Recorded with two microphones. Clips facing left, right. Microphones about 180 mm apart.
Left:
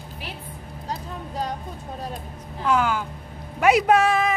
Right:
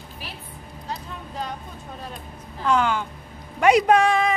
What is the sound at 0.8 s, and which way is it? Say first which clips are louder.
Music: left 2 dB; 40° left (ahead or behind).